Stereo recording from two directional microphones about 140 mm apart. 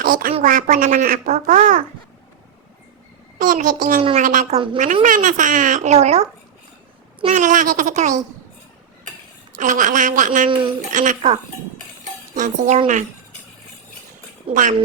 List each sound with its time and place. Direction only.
0.0 s speech: 90° right
0.4 s a child's voice: 75° right (ahead or behind)
1.5 s speech: 65° right (ahead or behind)
3.3 s a child's voice: 65° right (ahead or behind)
4.4 s a woman's voice: 40° right (ahead or behind)
5.0 s a child's voice: 75° right (ahead or behind); by 6.2 s 50° right (ahead or behind)
7.3 s speech: 65° right (ahead or behind)
9.6 s a child's voice: 65° right (ahead or behind)
10.5 s a woman's voice: 35° right (ahead or behind)
10.9 s a child's voice: 65° right (ahead or behind)
14.5 s speech: 65° right (ahead or behind)